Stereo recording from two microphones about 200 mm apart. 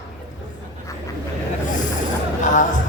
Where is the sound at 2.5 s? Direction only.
40° left (ahead or behind).